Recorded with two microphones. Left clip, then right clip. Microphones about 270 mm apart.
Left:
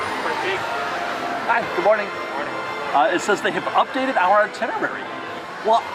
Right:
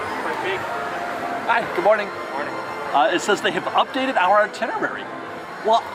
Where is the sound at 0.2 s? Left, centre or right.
Centre.